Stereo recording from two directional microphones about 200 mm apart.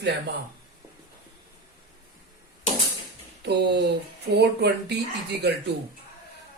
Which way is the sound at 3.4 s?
55° right (ahead or behind).